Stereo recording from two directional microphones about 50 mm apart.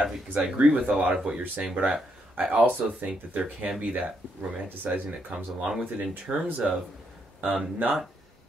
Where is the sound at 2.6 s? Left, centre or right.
Right.